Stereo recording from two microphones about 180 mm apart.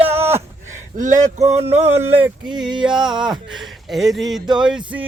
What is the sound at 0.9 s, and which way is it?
Speech, 45° right (ahead or behind).